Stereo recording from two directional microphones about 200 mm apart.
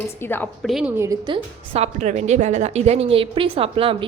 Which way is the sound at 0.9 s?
15° right (ahead or behind).